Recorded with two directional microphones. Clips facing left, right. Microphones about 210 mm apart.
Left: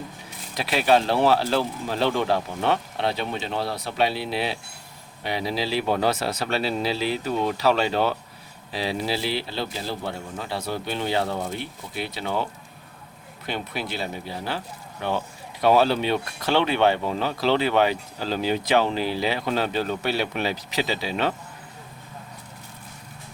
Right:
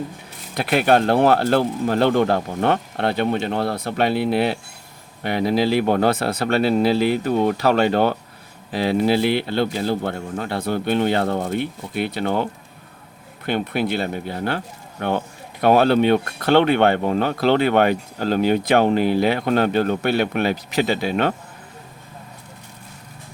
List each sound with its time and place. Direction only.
0.5 s speech: 55° right (ahead or behind)